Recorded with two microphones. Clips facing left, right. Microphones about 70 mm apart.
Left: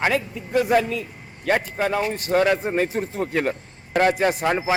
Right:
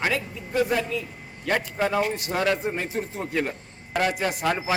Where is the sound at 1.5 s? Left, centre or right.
Centre.